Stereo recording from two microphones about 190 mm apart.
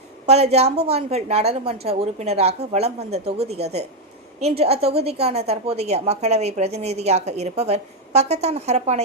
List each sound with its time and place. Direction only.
0.3 s a woman's voice: 35° right (ahead or behind)